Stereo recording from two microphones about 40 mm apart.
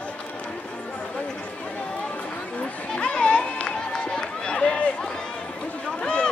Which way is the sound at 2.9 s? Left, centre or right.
Left.